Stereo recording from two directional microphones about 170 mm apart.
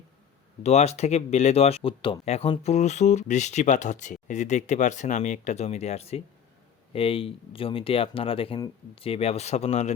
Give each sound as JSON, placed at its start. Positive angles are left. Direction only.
{"t": 0.6, "sound": "speech", "side_deg": 40}